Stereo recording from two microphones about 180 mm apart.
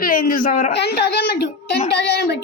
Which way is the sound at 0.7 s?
65° left (ahead or behind).